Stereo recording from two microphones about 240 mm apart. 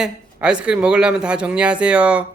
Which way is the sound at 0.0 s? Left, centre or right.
Centre.